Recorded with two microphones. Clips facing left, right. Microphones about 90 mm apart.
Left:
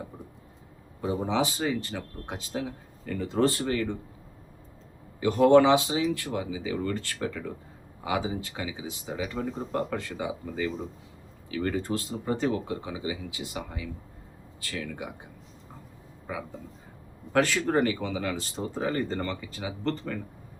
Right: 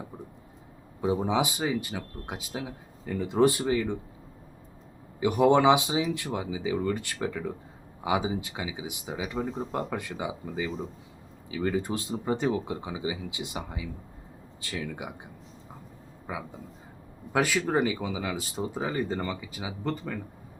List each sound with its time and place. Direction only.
1.0 s speech: 15° right (ahead or behind)
5.2 s speech: 15° right (ahead or behind)
17.3 s speech: 10° right (ahead or behind)